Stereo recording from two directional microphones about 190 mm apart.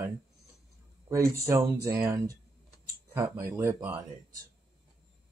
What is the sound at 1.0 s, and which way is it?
Speech, 15° right (ahead or behind).